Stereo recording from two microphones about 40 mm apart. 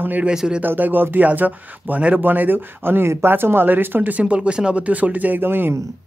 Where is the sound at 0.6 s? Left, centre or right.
Right.